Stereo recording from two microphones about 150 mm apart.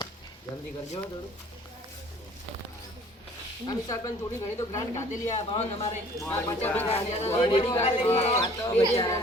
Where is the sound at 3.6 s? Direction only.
25° left (ahead or behind).